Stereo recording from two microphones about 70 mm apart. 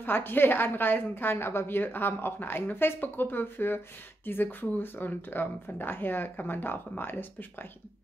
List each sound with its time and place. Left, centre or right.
0.0 s a woman's voice: left